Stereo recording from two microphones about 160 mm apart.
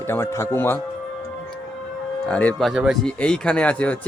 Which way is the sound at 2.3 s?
5° left (ahead or behind).